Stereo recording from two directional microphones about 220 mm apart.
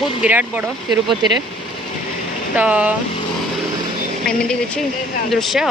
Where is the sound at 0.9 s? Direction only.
20° right (ahead or behind).